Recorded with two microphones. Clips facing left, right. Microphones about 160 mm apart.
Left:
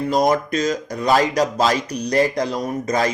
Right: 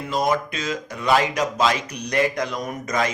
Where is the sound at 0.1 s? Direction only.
40° left (ahead or behind).